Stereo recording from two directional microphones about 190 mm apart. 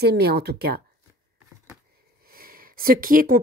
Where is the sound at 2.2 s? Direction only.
50° right (ahead or behind).